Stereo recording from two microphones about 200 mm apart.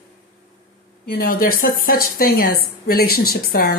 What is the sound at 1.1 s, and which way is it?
A woman's voice, 45° left (ahead or behind).